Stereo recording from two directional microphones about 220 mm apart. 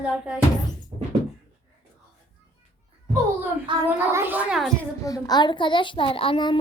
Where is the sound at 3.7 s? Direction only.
20° right (ahead or behind).